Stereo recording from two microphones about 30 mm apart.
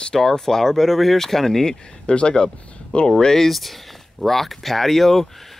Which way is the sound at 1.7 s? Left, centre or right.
Left.